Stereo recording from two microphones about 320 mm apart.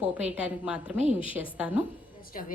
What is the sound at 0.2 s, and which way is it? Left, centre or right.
A woman's voice, centre.